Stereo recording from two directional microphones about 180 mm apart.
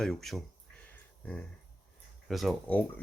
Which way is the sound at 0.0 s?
Centre (ahead or behind).